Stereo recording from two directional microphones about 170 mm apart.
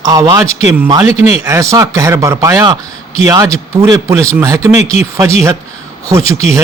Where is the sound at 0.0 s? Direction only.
20° right (ahead or behind).